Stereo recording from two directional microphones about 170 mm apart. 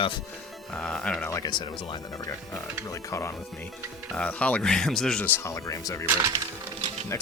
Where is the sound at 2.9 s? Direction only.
15° left (ahead or behind).